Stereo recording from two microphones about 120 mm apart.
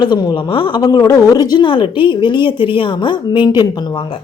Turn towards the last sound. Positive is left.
turn(degrees=35)  # may be behind; listen again after turning